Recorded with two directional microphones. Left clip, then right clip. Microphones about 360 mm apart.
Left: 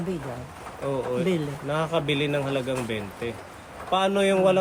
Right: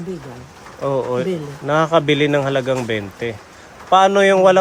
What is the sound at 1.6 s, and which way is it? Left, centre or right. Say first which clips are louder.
Speech: right 12 dB; centre.